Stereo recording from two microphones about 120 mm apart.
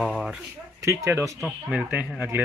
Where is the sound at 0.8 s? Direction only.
25° right (ahead or behind).